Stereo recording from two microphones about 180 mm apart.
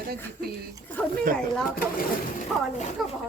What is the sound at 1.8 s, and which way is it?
Speech, 55° left (ahead or behind).